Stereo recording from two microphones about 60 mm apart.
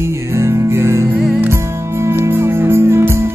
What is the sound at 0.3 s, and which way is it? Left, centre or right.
Music, right.